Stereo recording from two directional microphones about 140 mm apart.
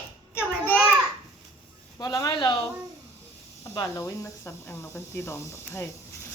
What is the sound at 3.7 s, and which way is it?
Speech, 25° left (ahead or behind).